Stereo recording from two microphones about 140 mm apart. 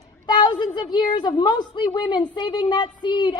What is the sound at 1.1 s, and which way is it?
A woman's voice, 30° left (ahead or behind).